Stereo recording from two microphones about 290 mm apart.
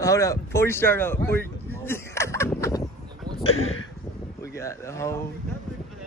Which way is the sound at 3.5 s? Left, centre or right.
Left.